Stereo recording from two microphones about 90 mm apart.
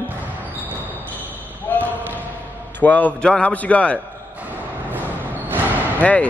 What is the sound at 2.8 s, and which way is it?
A man's voice, 20° left (ahead or behind).